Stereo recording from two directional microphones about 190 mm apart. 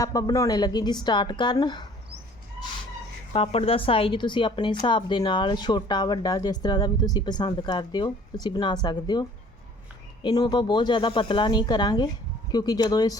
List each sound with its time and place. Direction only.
0.0 s a woman's voice: 20° left (ahead or behind)
3.3 s a woman's voice: 30° left (ahead or behind)
10.2 s a woman's voice: 20° left (ahead or behind)